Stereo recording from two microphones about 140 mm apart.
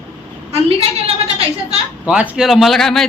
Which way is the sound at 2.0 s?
10° right (ahead or behind).